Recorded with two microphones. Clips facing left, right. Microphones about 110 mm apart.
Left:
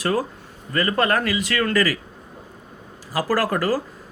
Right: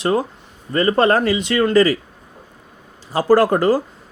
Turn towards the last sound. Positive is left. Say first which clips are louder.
# right 7 dB
turn(degrees=-25)  # may be behind; listen again after turning